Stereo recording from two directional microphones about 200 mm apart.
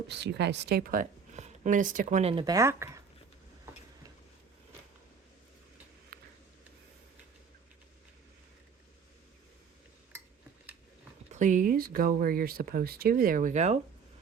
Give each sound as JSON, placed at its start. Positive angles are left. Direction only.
{"t": 0.1, "sound": "speech", "side_deg": -55}
{"t": 2.3, "sound": "speech", "side_deg": -20}
{"t": 6.1, "sound": "a sound", "side_deg": -50}
{"t": 11.3, "sound": "speech", "side_deg": -40}